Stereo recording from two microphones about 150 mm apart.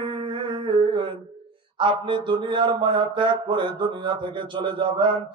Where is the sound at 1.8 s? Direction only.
30° right (ahead or behind).